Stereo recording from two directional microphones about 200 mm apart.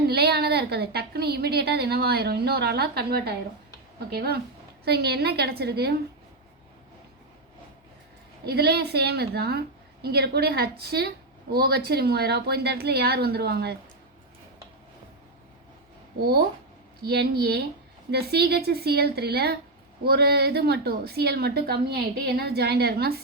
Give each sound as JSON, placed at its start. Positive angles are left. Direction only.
{"t": 0.1, "sound": "a woman's voice", "side_deg": -55}
{"t": 8.4, "sound": "a woman's voice", "side_deg": -55}
{"t": 17.0, "sound": "a woman's voice", "side_deg": -55}